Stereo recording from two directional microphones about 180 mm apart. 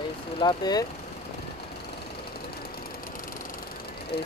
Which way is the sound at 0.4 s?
25° left (ahead or behind).